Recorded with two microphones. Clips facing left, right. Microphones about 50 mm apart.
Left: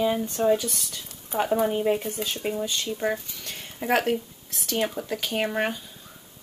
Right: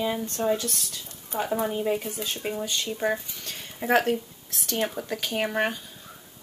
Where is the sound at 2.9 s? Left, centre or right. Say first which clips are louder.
Right 1 dB; centre.